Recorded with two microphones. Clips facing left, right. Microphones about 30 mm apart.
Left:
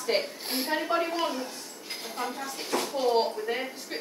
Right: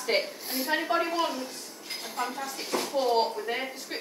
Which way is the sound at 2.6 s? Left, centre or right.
Left.